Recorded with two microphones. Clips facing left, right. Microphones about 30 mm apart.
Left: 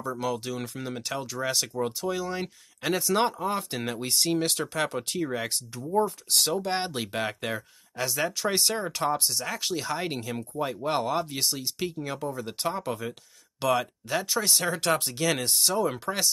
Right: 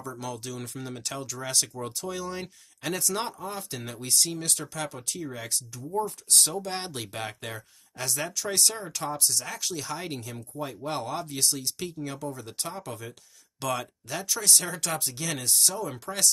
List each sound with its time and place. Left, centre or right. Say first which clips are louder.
0.0 s speech: left 6 dB; left
3.3 s speech: left 6 dB; left
5.3 s speech: left 5 dB; left; by 8.3 s centre
8.3 s speech: left 2 dB; left
9.3 s speech: left 2 dB; centre
9.6 s speech: left 3 dB; left
9.8 s speech: left 4 dB; left